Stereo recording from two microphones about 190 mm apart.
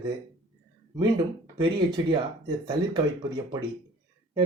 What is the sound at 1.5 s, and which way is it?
Speech, 25° right (ahead or behind).